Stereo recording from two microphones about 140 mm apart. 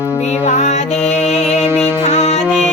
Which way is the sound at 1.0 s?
5° left (ahead or behind).